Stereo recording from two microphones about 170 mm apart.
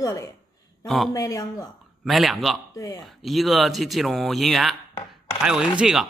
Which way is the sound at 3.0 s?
Centre (ahead or behind).